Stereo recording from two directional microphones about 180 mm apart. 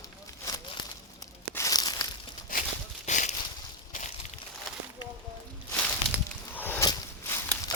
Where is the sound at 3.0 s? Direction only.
40° left (ahead or behind).